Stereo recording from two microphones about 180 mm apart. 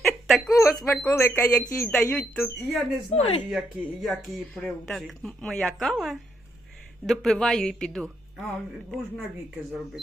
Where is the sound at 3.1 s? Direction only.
35° left (ahead or behind).